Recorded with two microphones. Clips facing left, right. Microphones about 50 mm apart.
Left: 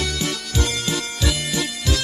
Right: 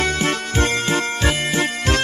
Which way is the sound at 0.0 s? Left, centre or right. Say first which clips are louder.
Right 5 dB; right.